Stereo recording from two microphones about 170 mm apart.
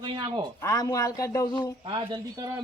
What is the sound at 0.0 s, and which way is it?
Speech, 30° right (ahead or behind).